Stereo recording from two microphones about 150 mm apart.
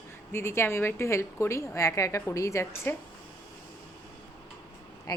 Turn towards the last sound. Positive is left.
turn(degrees=25)  # may be behind; listen again after turning